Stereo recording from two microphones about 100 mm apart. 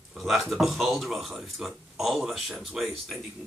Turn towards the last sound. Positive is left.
turn(degrees=0)  # may be behind; listen again after turning